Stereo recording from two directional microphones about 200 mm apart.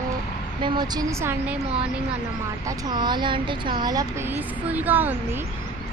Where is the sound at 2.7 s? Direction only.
20° right (ahead or behind).